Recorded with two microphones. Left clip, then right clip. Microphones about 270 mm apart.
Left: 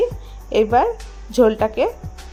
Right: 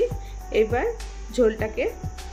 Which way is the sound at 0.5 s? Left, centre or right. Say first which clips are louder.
Left 6 dB; left.